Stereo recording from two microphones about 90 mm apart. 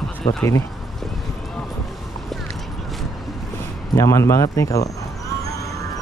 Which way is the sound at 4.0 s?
35° left (ahead or behind).